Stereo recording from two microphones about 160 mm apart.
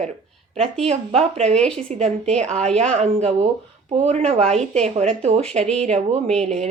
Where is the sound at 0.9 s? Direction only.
40° right (ahead or behind).